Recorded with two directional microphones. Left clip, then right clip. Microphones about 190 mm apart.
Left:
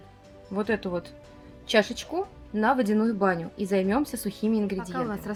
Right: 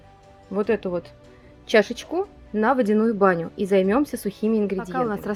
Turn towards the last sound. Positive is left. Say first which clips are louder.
# right 6 dB
turn(degrees=-40)  # may be behind; listen again after turning